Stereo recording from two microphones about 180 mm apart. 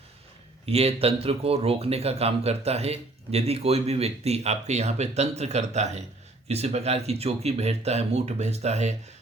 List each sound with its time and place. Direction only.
0.6 s speech: 35° right (ahead or behind)